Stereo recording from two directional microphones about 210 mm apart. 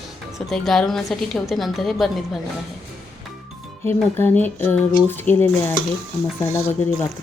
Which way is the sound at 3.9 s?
10° left (ahead or behind).